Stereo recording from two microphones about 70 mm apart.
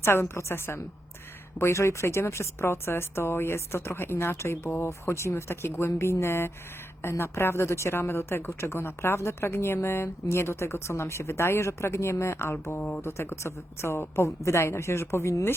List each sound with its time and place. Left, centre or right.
0.0 s a woman's voice: left